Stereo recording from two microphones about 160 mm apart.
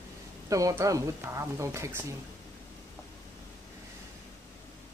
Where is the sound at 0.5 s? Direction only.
20° right (ahead or behind).